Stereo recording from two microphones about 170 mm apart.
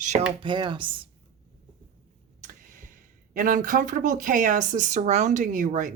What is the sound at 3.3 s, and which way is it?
Speech, 50° right (ahead or behind).